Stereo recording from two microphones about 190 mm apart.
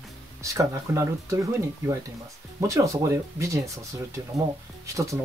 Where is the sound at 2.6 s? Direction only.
15° right (ahead or behind).